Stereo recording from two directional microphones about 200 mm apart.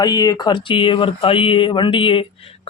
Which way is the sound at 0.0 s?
20° left (ahead or behind).